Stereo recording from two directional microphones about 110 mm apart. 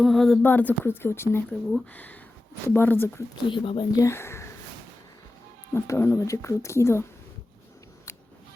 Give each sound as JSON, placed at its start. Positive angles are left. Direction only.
{"t": 0.0, "sound": "speech", "side_deg": 0}
{"t": 0.4, "sound": "speech", "side_deg": 15}
{"t": 3.5, "sound": "speech", "side_deg": 50}
{"t": 4.0, "sound": "speech", "side_deg": 25}
{"t": 5.7, "sound": "speech", "side_deg": 20}